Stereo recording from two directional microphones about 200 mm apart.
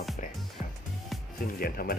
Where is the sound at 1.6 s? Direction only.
50° left (ahead or behind).